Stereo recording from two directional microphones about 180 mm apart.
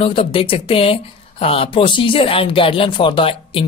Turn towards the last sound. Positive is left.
turn(degrees=30)  # may be behind; listen again after turning